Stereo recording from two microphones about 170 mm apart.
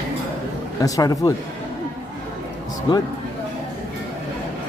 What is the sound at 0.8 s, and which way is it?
Speech, 20° left (ahead or behind).